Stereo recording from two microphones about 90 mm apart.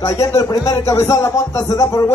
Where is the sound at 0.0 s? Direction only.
35° left (ahead or behind).